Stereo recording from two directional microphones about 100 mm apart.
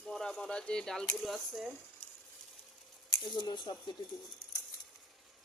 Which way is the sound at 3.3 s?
45° left (ahead or behind).